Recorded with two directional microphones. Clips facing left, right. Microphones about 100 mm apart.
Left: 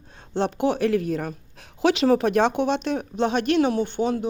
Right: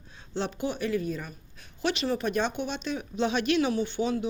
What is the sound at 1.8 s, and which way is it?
Speech, 90° left.